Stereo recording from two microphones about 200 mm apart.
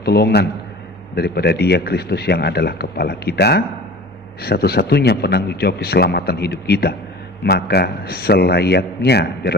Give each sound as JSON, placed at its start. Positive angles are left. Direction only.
{"t": 0.0, "sound": "a man's voice", "side_deg": 55}